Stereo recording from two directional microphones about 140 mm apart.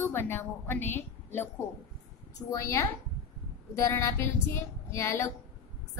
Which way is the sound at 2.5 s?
20° left (ahead or behind).